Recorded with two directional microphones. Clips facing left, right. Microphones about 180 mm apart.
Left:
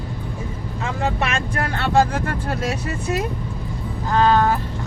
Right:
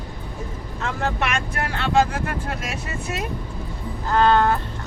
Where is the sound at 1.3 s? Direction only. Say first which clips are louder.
Left 2 dB; 40° left (ahead or behind).